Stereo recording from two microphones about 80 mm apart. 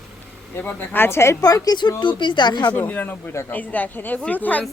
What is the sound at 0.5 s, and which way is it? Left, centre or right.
Speech, left.